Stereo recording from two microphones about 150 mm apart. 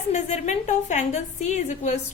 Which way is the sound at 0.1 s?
50° left (ahead or behind).